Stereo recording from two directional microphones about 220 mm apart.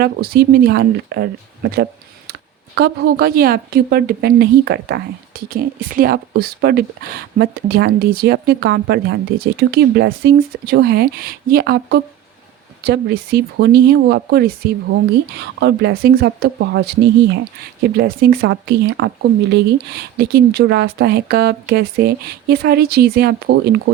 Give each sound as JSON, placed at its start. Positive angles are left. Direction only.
{"t": 0.0, "sound": "speech", "side_deg": -45}